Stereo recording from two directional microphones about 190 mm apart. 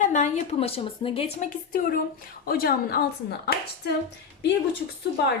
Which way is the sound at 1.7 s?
50° left (ahead or behind).